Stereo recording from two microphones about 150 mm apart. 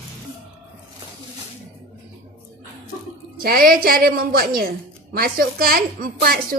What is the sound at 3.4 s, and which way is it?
A woman's voice, 80° right.